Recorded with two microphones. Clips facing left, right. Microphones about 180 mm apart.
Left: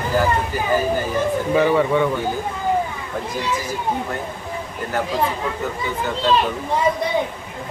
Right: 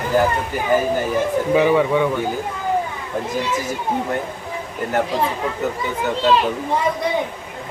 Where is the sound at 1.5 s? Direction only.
10° right (ahead or behind).